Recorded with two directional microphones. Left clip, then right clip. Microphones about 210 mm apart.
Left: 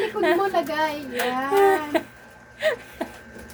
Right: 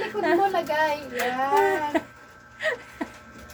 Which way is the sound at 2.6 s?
20° left (ahead or behind).